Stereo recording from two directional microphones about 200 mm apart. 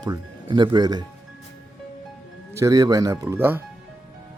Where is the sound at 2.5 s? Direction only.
15° right (ahead or behind).